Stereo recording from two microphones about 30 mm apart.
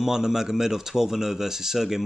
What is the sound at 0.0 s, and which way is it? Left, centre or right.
Speech, centre.